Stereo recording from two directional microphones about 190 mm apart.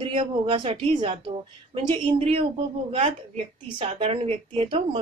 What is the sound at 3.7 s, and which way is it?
Speech, 30° right (ahead or behind).